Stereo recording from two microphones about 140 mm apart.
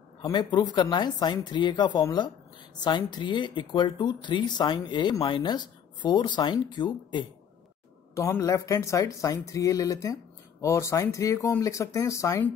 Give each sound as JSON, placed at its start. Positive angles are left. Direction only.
{"t": 0.2, "sound": "speech", "side_deg": 30}
{"t": 8.1, "sound": "speech", "side_deg": 20}